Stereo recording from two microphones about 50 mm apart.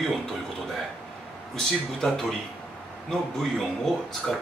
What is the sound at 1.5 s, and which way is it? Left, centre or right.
A man's voice, centre.